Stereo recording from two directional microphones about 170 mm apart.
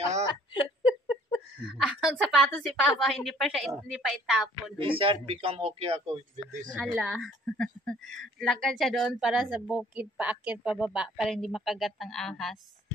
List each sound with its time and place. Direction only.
0.3 s a sound: 30° left (ahead or behind)
1.8 s a woman's voice: centre (ahead or behind)
4.7 s speech: 30° right (ahead or behind)
6.7 s a woman's voice: 5° right (ahead or behind)